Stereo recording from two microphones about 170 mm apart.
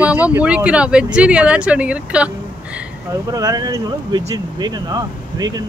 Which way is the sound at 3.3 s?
20° right (ahead or behind).